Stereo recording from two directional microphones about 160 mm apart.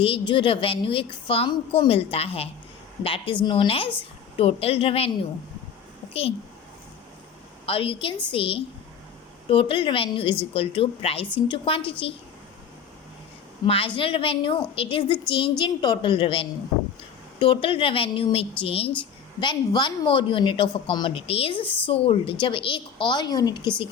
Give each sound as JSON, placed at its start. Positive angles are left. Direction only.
{"t": 0.0, "sound": "a woman's voice", "side_deg": 35}
{"t": 7.7, "sound": "a woman's voice", "side_deg": 35}
{"t": 13.7, "sound": "a woman's voice", "side_deg": 35}